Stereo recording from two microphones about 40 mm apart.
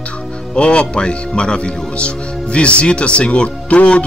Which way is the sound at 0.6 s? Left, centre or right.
Left.